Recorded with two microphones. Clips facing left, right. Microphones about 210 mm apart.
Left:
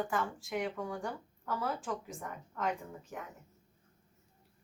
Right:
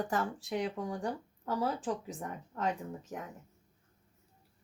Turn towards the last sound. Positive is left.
turn(degrees=-40)  # may be behind; listen again after turning